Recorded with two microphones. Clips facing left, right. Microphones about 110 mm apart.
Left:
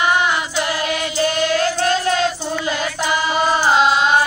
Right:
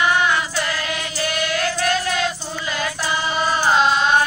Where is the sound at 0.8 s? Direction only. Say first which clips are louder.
Left 6 dB; 25° left (ahead or behind).